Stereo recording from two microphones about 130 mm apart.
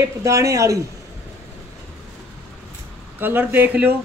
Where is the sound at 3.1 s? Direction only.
15° right (ahead or behind).